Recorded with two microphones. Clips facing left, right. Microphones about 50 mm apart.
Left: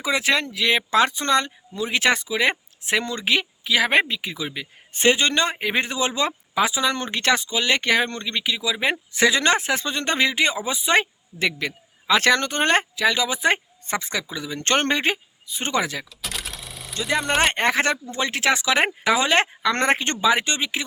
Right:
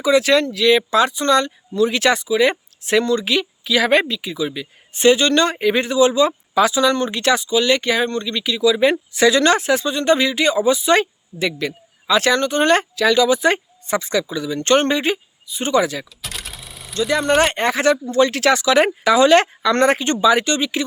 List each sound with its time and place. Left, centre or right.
0.0 s speech: left
4.2 s speech: left
6.5 s speech: left
7.1 s speech: left
13.0 s speech: left
13.8 s speech: left
16.2 s a sound: centre
17.2 s speech: centre
17.5 s speech: left
18.1 s speech: left
19.8 s speech: left